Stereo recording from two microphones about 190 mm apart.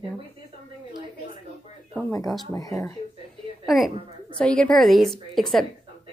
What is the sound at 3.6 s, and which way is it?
A woman's voice, centre (ahead or behind).